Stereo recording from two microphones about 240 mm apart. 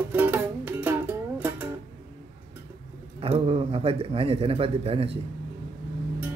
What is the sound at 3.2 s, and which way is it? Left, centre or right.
A man's voice, right.